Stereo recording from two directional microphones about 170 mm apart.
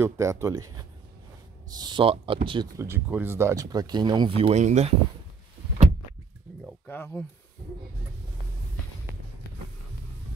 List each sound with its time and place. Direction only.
0.0 s speech: 15° right (ahead or behind)
2.8 s speech: 10° right (ahead or behind); by 4.9 s 40° right (ahead or behind)
6.6 s speech: 15° left (ahead or behind)